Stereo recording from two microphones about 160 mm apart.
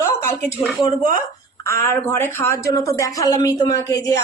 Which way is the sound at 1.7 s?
15° left (ahead or behind).